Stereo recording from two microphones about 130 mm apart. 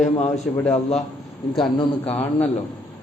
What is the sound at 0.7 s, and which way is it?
Speech, 60° left (ahead or behind).